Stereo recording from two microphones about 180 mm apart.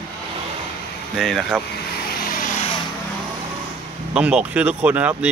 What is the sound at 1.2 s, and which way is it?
Speech, centre (ahead or behind).